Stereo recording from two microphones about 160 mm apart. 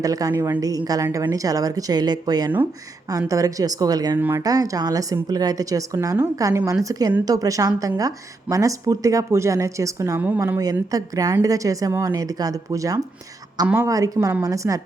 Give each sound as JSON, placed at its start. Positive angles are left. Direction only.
{"t": 0.0, "sound": "speech", "side_deg": -20}
{"t": 10.6, "sound": "speech", "side_deg": -25}